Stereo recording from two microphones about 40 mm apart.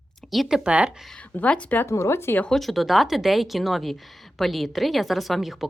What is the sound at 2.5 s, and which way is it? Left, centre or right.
A woman's voice, centre.